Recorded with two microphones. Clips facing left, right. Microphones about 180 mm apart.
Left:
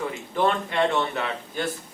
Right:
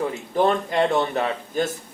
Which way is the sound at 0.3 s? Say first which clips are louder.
Right 3 dB; 40° right (ahead or behind).